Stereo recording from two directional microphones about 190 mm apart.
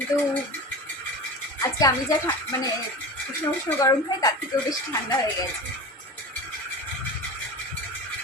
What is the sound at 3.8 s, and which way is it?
A woman's voice, 20° left (ahead or behind).